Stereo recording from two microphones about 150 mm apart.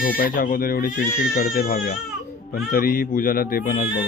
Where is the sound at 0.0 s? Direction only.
70° left (ahead or behind).